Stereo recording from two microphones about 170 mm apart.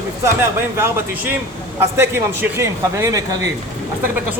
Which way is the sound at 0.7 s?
15° right (ahead or behind).